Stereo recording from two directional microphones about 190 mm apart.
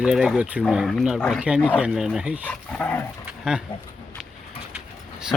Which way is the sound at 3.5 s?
5° right (ahead or behind).